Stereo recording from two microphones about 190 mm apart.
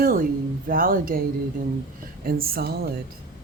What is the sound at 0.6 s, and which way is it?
Speech, 50° right (ahead or behind).